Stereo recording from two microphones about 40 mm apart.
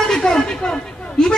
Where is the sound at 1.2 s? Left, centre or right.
Centre.